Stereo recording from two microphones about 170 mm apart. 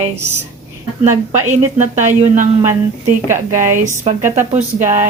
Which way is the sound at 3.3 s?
15° right (ahead or behind).